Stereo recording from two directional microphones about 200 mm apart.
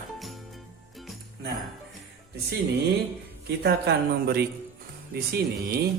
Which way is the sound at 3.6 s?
55° right (ahead or behind).